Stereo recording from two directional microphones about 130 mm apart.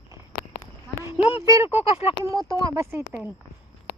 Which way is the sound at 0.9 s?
25° right (ahead or behind).